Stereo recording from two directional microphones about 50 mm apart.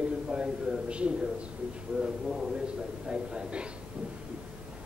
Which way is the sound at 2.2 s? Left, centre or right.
Centre.